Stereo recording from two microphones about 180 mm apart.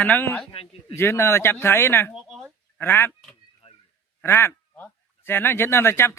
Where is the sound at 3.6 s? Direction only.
30° left (ahead or behind).